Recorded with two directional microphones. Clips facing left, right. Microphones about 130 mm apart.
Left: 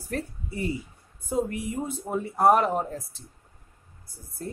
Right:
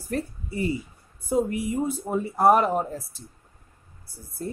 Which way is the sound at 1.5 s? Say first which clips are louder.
Right 5 dB; 10° right (ahead or behind).